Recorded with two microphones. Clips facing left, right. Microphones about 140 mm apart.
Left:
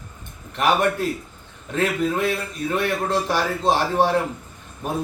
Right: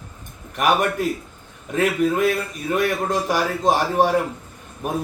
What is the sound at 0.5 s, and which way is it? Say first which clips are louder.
A man's voice: even; 10° right (ahead or behind).